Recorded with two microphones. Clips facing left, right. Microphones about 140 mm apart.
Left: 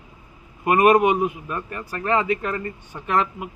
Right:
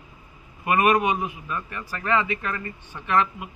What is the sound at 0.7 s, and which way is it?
A man's voice, 45° left (ahead or behind).